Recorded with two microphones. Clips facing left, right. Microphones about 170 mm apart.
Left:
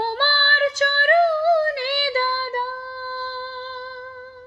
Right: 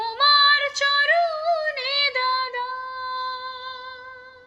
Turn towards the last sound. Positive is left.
turn(degrees=45)  # may be behind; listen again after turning